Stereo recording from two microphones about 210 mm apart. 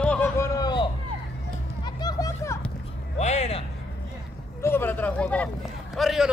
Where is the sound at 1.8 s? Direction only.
20° left (ahead or behind).